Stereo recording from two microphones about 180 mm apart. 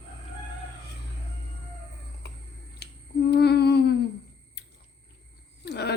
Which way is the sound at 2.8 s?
65° left (ahead or behind).